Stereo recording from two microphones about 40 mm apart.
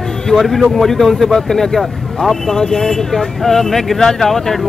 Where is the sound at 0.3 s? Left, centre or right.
Centre.